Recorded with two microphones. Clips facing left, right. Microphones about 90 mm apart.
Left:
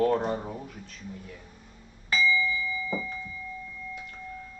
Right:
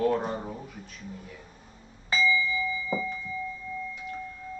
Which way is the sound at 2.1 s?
25° right (ahead or behind).